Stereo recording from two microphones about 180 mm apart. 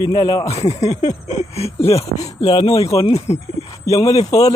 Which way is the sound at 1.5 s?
35° left (ahead or behind).